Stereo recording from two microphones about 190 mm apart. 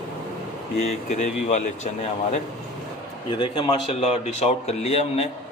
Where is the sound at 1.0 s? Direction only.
40° left (ahead or behind).